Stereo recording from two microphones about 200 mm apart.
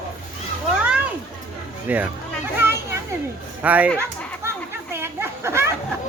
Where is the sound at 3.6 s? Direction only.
10° right (ahead or behind).